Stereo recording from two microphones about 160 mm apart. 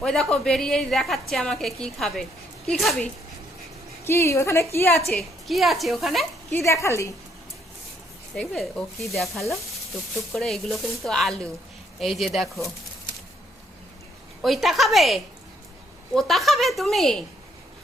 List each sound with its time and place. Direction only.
0.0 s a woman's voice: 5° left (ahead or behind)
4.0 s a woman's voice: 15° left (ahead or behind)
5.0 s a woman's voice: centre (ahead or behind)
6.5 s a woman's voice: 20° left (ahead or behind)
8.4 s a woman's voice: centre (ahead or behind)
14.4 s a woman's voice: centre (ahead or behind)